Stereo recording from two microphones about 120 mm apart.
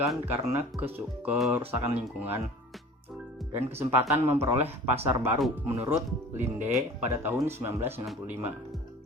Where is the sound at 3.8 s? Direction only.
20° right (ahead or behind).